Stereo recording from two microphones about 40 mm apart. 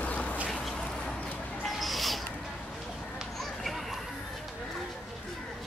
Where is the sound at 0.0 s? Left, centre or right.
Left.